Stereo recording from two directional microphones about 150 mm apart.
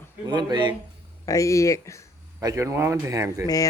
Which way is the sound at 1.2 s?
20° left (ahead or behind).